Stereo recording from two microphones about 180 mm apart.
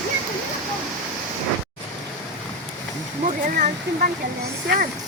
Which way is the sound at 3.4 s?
50° right (ahead or behind).